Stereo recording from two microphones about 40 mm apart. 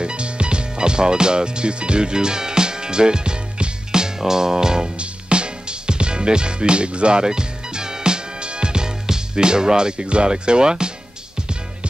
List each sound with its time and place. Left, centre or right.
0.0 s music: right